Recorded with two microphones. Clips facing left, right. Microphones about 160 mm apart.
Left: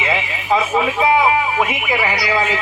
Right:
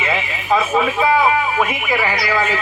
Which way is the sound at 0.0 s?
20° left (ahead or behind).